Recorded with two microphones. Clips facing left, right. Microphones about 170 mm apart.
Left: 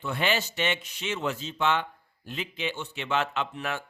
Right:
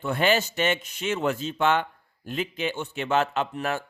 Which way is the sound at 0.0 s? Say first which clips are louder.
Right 5 dB; 45° right (ahead or behind).